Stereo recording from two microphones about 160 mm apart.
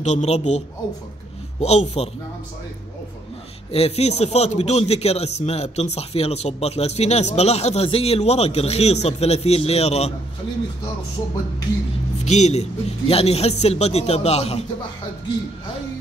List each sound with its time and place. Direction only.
0.0 s a man's voice: 45° left (ahead or behind)
3.7 s a man's voice: 40° left (ahead or behind)
12.3 s a man's voice: 45° left (ahead or behind)